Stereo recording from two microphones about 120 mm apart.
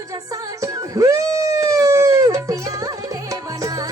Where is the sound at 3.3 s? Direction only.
30° right (ahead or behind).